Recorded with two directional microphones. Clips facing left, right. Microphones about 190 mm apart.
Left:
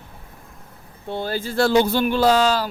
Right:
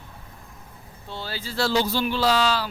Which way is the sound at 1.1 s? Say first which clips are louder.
Left 8 dB; 50° left (ahead or behind).